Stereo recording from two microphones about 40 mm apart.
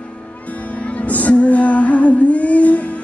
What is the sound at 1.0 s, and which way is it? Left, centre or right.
Music, left.